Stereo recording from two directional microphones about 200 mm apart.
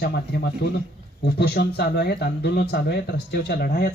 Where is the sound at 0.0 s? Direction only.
55° left (ahead or behind).